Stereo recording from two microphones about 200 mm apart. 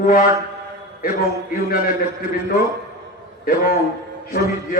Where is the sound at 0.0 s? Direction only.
45° left (ahead or behind).